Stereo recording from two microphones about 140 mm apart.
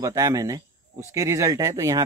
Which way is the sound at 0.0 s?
25° right (ahead or behind).